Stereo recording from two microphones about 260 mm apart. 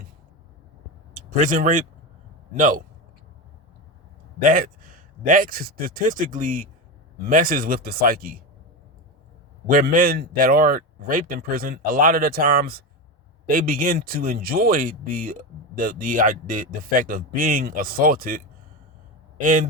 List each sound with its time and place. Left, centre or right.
1.1 s speech: right
4.4 s speech: right
9.6 s speech: right